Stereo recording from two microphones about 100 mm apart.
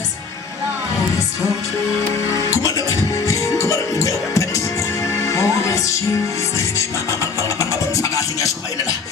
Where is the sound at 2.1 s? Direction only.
30° left (ahead or behind).